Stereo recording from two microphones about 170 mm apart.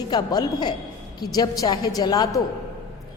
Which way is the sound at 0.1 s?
25° left (ahead or behind).